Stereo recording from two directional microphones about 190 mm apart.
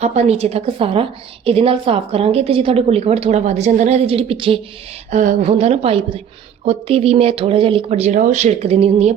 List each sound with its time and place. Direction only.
0.0 s a woman's voice: 35° right (ahead or behind)
5.1 s a woman's voice: 40° right (ahead or behind)